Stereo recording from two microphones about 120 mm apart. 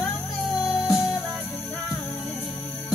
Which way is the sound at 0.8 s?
20° left (ahead or behind).